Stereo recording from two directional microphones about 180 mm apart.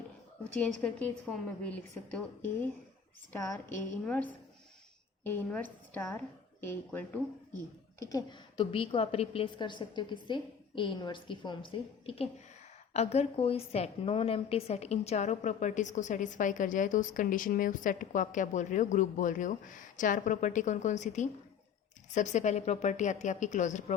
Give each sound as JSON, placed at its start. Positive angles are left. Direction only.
{"t": 0.5, "sound": "a woman's voice", "side_deg": 5}
{"t": 4.0, "sound": "a woman's voice", "side_deg": 5}